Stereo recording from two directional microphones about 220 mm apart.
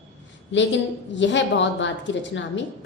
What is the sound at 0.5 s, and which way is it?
A woman's voice, 55° left (ahead or behind).